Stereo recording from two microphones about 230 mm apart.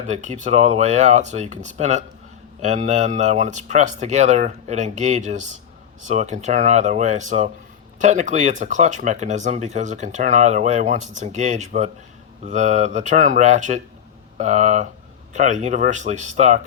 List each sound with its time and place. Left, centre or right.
0.1 s speech: right